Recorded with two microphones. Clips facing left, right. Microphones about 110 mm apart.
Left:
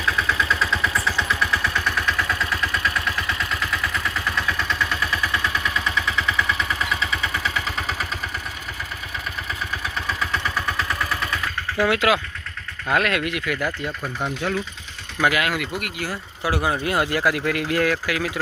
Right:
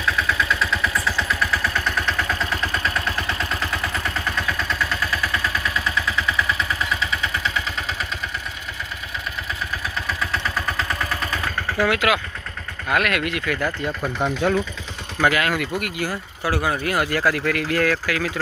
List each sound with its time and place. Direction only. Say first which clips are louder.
2.0 s vehicle: even; 30° right (ahead or behind)
11.8 s speech: left 1 dB; 25° left (ahead or behind)
15.2 s speech: right 1 dB; 10° left (ahead or behind)
16.4 s speech: even; 20° left (ahead or behind)